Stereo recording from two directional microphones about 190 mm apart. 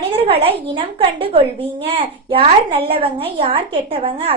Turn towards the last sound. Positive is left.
turn(degrees=-30)  # may be behind; listen again after turning